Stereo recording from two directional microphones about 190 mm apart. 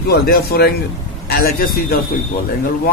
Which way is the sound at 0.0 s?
55° left (ahead or behind).